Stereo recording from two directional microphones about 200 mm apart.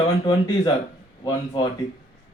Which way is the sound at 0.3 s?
20° left (ahead or behind).